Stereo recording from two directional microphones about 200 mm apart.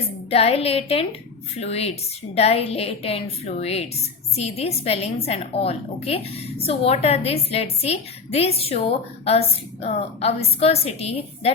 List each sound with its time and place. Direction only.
0.3 s a woman's voice: 30° left (ahead or behind)